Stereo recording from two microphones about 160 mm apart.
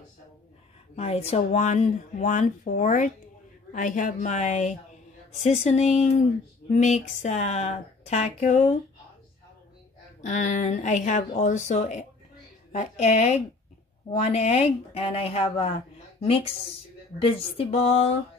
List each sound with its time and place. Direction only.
0.9 s speech: 40° left (ahead or behind)
10.2 s speech: 50° left (ahead or behind)